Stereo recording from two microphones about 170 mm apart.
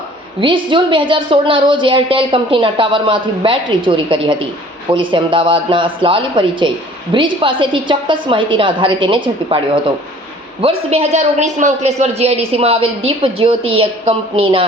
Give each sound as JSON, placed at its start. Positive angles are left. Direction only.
{"t": 0.3, "sound": "a woman's voice", "side_deg": -30}